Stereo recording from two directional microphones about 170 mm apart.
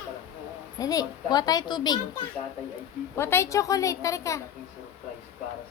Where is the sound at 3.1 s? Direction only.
15° left (ahead or behind).